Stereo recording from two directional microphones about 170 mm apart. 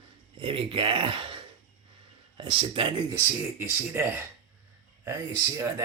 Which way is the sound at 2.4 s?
30° right (ahead or behind).